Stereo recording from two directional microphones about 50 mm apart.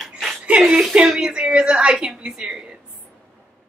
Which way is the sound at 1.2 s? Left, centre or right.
Centre.